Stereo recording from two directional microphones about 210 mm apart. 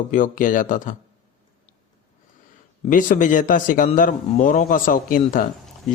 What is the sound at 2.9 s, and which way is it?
A man's voice, 40° left (ahead or behind).